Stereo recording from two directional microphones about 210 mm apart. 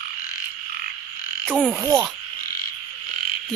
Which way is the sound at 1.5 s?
5° right (ahead or behind).